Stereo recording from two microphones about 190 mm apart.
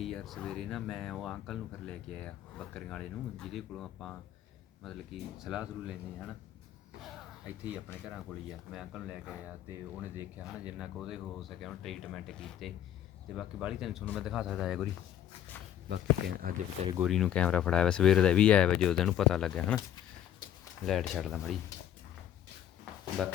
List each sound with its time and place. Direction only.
0.0 s speech: centre (ahead or behind)
8.7 s speech: 5° right (ahead or behind)
15.9 s speech: 60° right (ahead or behind)
17.0 s speech: centre (ahead or behind)
20.8 s speech: centre (ahead or behind)